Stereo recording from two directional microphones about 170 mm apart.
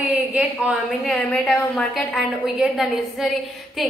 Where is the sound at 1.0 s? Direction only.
5° left (ahead or behind).